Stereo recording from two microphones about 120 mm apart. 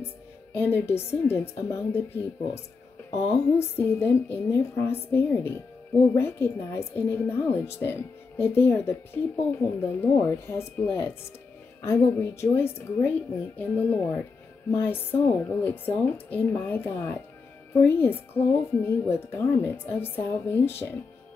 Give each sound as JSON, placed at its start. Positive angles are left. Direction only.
{"t": 0.6, "sound": "a woman's voice", "side_deg": 20}